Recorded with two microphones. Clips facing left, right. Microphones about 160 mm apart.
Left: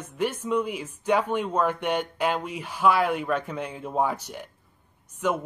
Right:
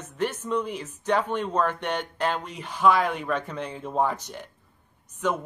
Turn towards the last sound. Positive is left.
turn(degrees=10)  # may be behind; listen again after turning